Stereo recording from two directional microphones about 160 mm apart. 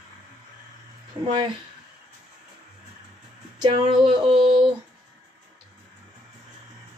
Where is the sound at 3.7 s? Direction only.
35° right (ahead or behind).